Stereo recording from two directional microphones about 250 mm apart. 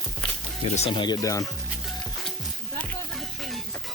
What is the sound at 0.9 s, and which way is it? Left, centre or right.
Speech, centre.